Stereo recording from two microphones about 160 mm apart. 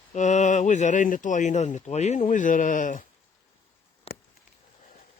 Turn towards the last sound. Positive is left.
turn(degrees=40)  # may be behind; listen again after turning